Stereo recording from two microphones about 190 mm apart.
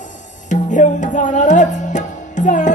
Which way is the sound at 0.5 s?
40° left (ahead or behind).